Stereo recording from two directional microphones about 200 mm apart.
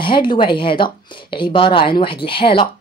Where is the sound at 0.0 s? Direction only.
25° left (ahead or behind).